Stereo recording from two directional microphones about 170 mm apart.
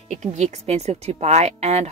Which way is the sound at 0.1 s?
45° right (ahead or behind).